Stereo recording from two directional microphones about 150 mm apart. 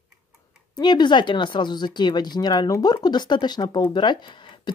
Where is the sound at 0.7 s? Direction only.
30° left (ahead or behind).